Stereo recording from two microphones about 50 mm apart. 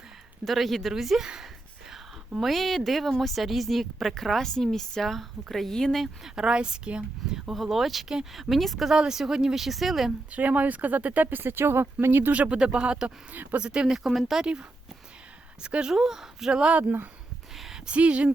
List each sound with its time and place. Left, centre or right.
0.4 s speech: centre
2.4 s speech: centre
6.2 s speech: centre
7.5 s speech: centre
9.0 s speech: centre
10.3 s speech: right
12.3 s speech: right
13.3 s speech: right
13.6 s speech: centre
15.6 s speech: centre
16.6 s speech: right
17.8 s speech: right